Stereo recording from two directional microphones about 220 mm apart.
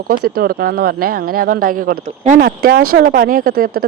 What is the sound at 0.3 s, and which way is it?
A woman's voice, 45° right (ahead or behind).